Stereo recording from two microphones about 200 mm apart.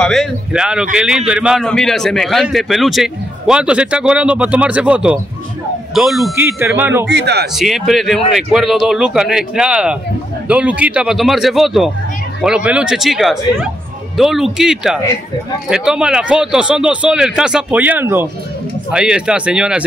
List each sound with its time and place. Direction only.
0.0 s a man's voice: centre (ahead or behind)
6.3 s speech: 10° right (ahead or behind)
7.1 s a man's voice: 55° right (ahead or behind)
7.5 s a man's voice: centre (ahead or behind)